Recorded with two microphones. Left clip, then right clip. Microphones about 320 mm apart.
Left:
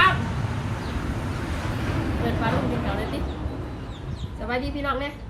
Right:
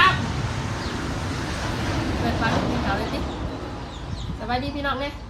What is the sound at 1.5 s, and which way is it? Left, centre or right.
Vehicle, right.